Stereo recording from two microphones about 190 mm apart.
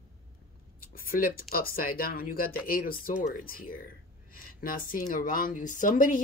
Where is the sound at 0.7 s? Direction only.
50° left (ahead or behind).